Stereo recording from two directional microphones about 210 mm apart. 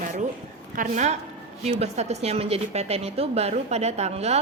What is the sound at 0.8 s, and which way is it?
A woman's voice, 35° right (ahead or behind).